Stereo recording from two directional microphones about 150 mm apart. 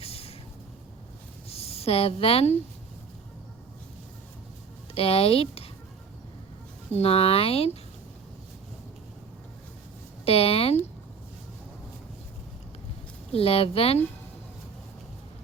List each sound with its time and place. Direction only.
0.0 s vehicle: 40° left (ahead or behind)
1.5 s speech: 40° left (ahead or behind)
4.9 s speech: 40° left (ahead or behind)
6.9 s speech: 40° left (ahead or behind)
10.2 s speech: 40° left (ahead or behind)
13.3 s speech: 40° left (ahead or behind)